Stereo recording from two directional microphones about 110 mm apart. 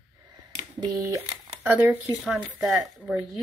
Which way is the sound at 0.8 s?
30° right (ahead or behind).